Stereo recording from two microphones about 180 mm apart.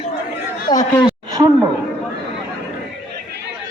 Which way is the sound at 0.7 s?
25° left (ahead or behind).